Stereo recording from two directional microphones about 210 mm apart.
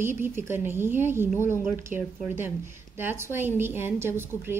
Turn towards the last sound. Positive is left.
turn(degrees=-10)  # may be behind; listen again after turning